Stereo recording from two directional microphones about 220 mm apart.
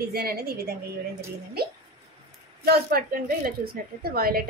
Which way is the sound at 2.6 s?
45° right (ahead or behind).